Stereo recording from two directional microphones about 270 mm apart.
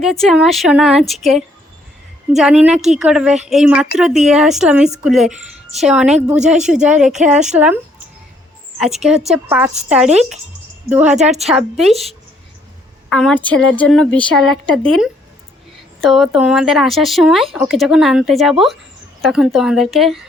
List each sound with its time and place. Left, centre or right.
0.0 s speech: centre
9.3 s a woman's voice: centre
10.8 s speech: centre
11.2 s a woman's voice: right
13.1 s speech: centre